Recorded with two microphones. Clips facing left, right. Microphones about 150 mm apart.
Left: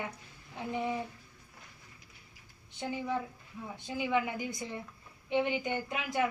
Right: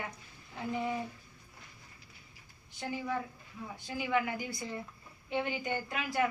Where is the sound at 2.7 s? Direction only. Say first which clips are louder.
Left 1 dB; 20° left (ahead or behind).